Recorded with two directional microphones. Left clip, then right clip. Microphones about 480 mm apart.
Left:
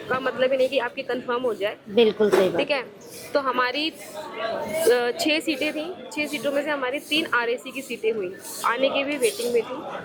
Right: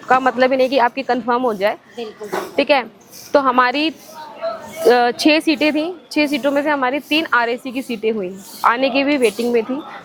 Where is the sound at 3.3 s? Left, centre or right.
Right.